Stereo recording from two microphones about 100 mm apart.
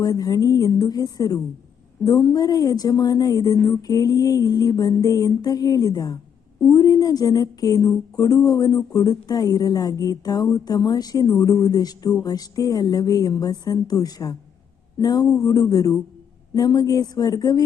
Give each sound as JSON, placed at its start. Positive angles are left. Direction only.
{"t": 0.0, "sound": "speech", "side_deg": 40}